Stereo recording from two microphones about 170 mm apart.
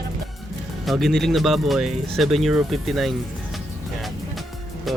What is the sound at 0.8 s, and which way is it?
Speech, centre (ahead or behind).